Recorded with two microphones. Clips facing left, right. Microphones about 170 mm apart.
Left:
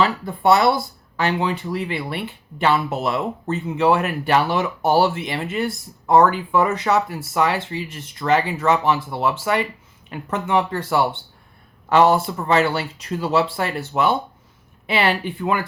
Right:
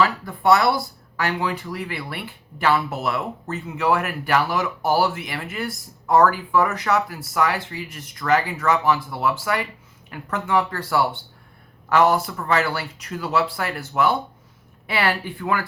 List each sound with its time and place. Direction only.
0.0 s speech: 25° left (ahead or behind)